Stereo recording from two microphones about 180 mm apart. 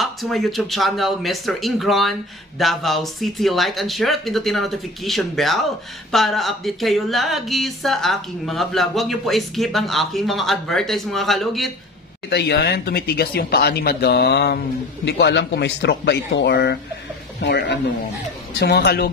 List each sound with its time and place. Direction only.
0.0 s speech: centre (ahead or behind)
12.3 s speech: 65° left (ahead or behind)